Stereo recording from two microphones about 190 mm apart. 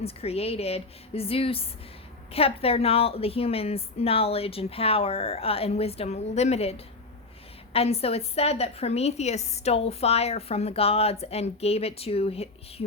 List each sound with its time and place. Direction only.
0.0 s a woman's voice: 30° left (ahead or behind)